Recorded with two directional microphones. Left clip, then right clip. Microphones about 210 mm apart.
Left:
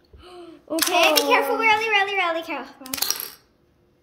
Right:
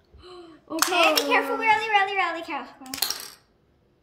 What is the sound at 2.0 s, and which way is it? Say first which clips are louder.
Speech: left 2 dB; 60° right (ahead or behind).